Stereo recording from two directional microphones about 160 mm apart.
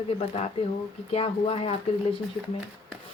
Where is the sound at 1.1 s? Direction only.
35° left (ahead or behind).